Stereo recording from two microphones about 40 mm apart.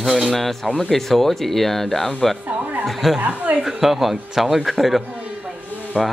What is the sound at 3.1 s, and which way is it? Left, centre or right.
Speech, right.